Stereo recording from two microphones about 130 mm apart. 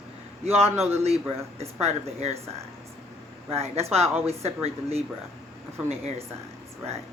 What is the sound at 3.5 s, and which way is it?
Speech, 55° right (ahead or behind).